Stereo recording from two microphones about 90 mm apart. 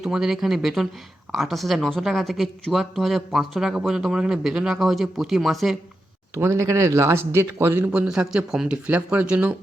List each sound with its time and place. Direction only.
0.0 s speech: 5° right (ahead or behind)
6.3 s speech: 30° right (ahead or behind)
7.9 s speech: 10° right (ahead or behind)